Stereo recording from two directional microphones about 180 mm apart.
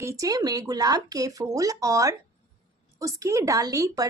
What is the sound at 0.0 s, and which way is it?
A woman's voice, 15° right (ahead or behind).